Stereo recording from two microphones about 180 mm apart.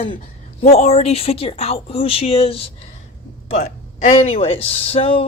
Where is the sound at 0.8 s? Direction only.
35° left (ahead or behind).